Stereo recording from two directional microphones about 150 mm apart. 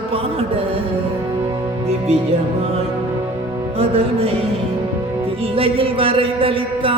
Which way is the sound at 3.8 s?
40° right (ahead or behind).